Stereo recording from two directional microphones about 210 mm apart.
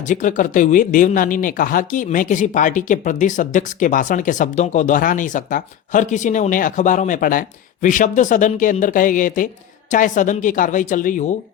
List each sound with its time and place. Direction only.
0.1 s speech: 40° left (ahead or behind)